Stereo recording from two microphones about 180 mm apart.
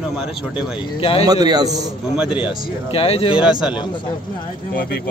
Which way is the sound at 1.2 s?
20° right (ahead or behind).